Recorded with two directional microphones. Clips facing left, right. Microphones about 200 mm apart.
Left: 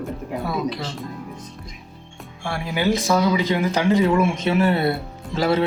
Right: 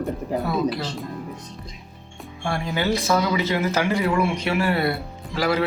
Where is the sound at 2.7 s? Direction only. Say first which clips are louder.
Left 3 dB; 15° left (ahead or behind).